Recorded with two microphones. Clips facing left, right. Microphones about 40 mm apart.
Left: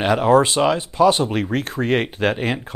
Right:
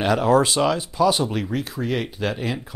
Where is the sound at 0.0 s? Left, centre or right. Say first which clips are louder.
Left 3 dB; left.